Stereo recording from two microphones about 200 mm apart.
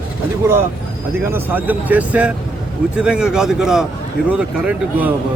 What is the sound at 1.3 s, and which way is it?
Speech, 10° right (ahead or behind).